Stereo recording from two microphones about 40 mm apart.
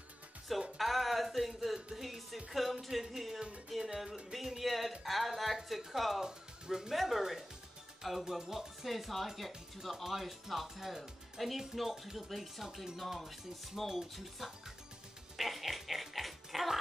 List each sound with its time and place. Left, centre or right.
0.7 s a sound: centre
2.0 s speech: centre
6.2 s music: centre
6.9 s speech: centre
15.3 s music: centre